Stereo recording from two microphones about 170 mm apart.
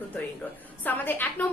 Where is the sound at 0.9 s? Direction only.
10° left (ahead or behind).